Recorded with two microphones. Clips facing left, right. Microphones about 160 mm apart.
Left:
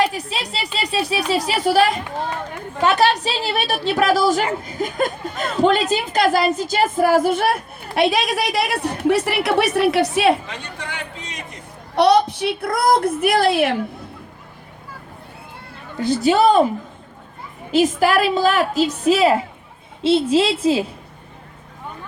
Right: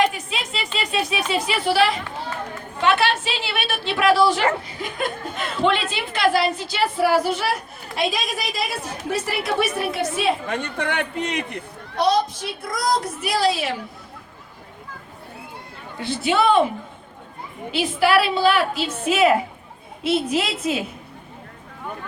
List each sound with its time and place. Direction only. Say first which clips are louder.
0.0 s speech: left 1 dB; 35° left (ahead or behind)
2.8 s a sound: left 3 dB; 40° left (ahead or behind)
4.6 s speech: left 6 dB; 45° left (ahead or behind); by 10.3 s 70° left (ahead or behind)
10.4 s speech: right 7 dB; 55° right (ahead or behind)
11.9 s a woman's voice: left 5 dB; 70° left (ahead or behind)
16.0 s speech: left 5 dB; 40° left (ahead or behind)
17.7 s a woman's voice: left 3 dB; 45° left (ahead or behind)